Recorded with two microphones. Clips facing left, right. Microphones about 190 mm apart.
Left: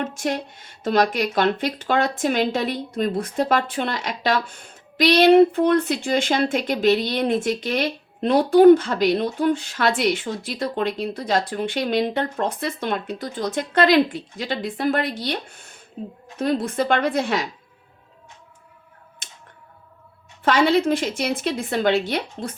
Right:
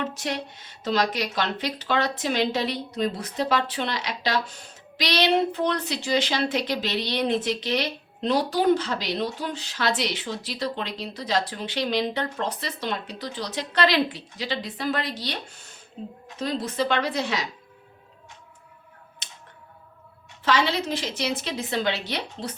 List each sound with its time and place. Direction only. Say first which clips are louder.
0.0 s a woman's voice: left 4 dB; 50° left (ahead or behind)
19.2 s a sound: even; 50° left (ahead or behind)
20.4 s a woman's voice: left 6 dB; 50° left (ahead or behind)